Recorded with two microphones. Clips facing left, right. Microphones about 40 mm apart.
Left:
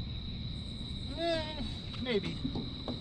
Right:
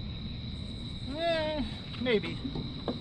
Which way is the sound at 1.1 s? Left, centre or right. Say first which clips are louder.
Right 4 dB; right.